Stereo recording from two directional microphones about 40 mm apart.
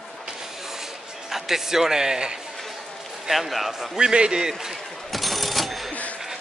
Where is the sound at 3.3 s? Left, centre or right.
Centre.